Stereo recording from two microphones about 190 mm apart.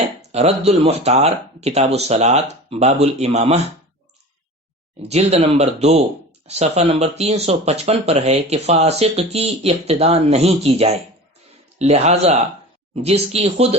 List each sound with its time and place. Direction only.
0.2 s speech: 35° right (ahead or behind)
5.0 s speech: 35° right (ahead or behind)